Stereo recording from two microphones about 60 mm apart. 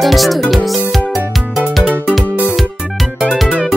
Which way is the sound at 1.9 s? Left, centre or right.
Right.